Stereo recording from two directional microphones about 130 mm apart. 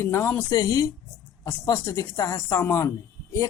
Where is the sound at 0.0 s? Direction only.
20° left (ahead or behind).